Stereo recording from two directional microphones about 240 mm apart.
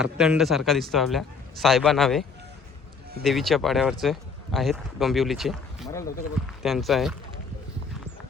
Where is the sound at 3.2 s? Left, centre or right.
Centre.